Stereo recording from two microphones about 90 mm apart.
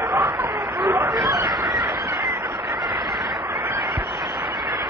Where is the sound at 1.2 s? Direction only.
55° right (ahead or behind).